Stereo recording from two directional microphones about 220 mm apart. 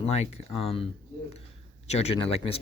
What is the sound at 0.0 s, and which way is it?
Speech, 30° left (ahead or behind).